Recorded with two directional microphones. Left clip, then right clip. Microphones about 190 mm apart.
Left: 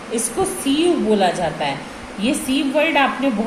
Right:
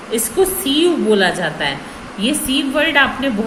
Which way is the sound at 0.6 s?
45° right (ahead or behind).